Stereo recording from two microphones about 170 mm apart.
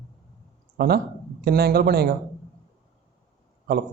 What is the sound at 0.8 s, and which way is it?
Speech, 65° right (ahead or behind).